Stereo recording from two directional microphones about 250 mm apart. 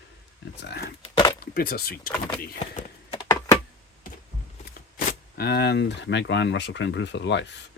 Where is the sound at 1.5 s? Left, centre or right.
Left.